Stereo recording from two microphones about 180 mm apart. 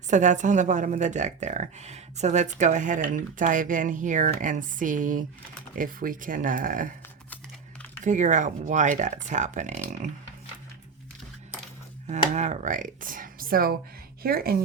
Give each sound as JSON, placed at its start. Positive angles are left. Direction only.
{"t": 0.1, "sound": "a woman's voice", "side_deg": -45}
{"t": 8.0, "sound": "a woman's voice", "side_deg": -45}
{"t": 12.3, "sound": "a woman's voice", "side_deg": -40}